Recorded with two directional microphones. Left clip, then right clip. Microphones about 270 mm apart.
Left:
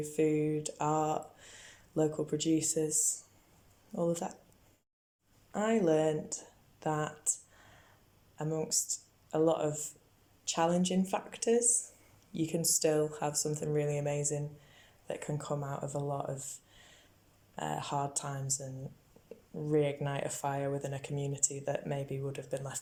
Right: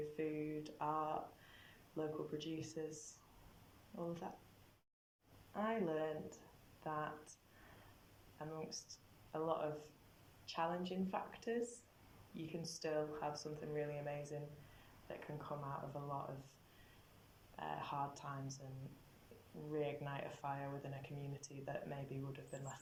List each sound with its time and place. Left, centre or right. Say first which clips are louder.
0.0 s speech: left 13 dB; left
5.5 s speech: left 12 dB; left
8.4 s speech: left 14 dB; left
17.6 s speech: left 9 dB; left
19.7 s speech: left 12 dB; left